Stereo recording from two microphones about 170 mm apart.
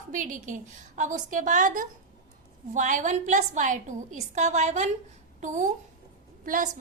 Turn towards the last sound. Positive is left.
turn(degrees=-55)  # may be behind; listen again after turning